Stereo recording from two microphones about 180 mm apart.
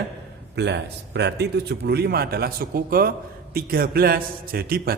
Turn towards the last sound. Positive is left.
turn(degrees=-60)  # may be behind; listen again after turning